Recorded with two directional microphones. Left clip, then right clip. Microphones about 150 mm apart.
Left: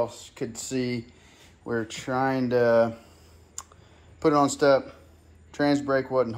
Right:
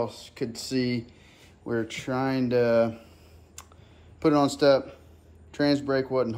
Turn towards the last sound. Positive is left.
turn(degrees=-5)  # may be behind; listen again after turning